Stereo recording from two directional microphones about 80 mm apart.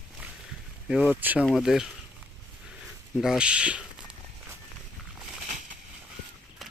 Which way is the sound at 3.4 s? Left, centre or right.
Centre.